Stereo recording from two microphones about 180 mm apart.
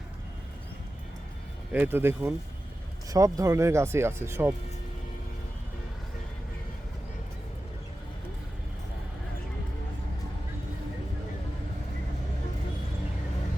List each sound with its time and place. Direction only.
1.7 s speech: 10° right (ahead or behind)